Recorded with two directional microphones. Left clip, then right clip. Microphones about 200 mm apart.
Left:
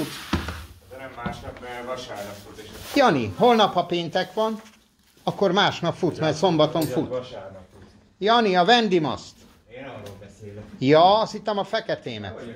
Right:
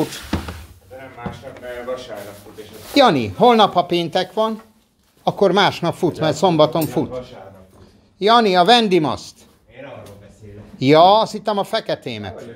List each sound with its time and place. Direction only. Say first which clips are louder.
2.9 s speech: right 5 dB; 20° right (ahead or behind)
8.2 s speech: right 6 dB; 25° right (ahead or behind)
10.8 s speech: right 5 dB; 25° right (ahead or behind)